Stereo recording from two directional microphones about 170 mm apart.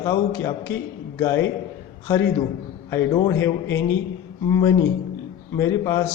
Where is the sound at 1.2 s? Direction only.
15° left (ahead or behind).